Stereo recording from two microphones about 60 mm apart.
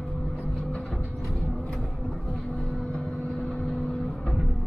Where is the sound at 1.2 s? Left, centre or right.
Centre.